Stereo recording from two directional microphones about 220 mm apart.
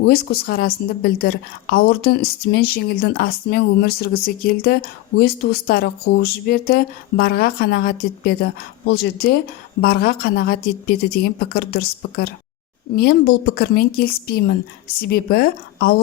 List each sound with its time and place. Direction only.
0.0 s a woman's voice: 45° left (ahead or behind)